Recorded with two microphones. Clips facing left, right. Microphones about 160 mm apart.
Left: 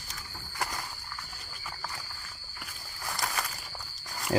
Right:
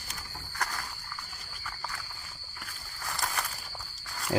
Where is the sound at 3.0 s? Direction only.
5° left (ahead or behind).